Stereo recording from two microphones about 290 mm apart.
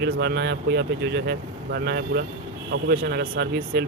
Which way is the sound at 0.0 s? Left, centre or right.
Right.